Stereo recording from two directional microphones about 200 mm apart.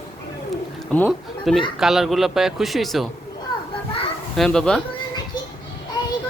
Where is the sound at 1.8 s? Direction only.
Centre (ahead or behind).